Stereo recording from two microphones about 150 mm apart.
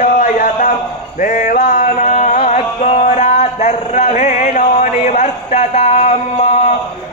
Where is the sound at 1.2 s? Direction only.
60° left (ahead or behind); by 6.2 s 45° left (ahead or behind).